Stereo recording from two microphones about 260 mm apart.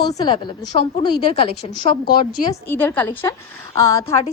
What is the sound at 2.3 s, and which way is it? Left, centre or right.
A woman's voice, centre.